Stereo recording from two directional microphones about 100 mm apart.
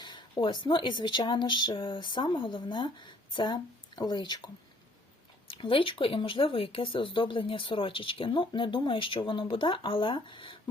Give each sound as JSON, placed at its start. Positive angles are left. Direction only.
{"t": 0.0, "sound": "speech", "side_deg": 50}
{"t": 5.5, "sound": "speech", "side_deg": 60}